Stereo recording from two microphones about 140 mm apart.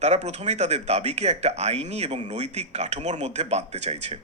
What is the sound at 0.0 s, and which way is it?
Speech, 55° right (ahead or behind).